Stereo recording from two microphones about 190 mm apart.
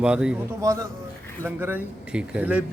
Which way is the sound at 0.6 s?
15° right (ahead or behind).